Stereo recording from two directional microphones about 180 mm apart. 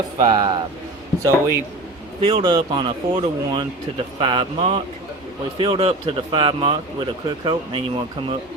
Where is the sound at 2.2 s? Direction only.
30° right (ahead or behind).